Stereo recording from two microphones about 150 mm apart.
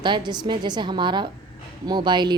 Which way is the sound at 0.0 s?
30° right (ahead or behind).